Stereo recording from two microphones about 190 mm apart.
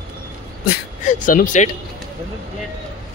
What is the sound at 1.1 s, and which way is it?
Speech, 45° left (ahead or behind).